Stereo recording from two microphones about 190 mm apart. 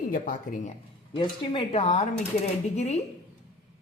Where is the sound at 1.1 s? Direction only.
25° left (ahead or behind).